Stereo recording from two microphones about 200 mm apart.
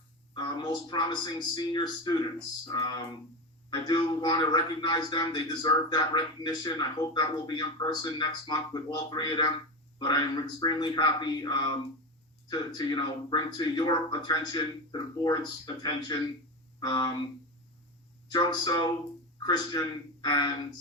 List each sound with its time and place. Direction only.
0.3 s a man's voice: 20° left (ahead or behind)
18.3 s a man's voice: 20° left (ahead or behind)